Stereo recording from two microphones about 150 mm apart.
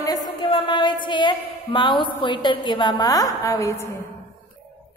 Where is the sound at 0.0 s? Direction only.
25° left (ahead or behind).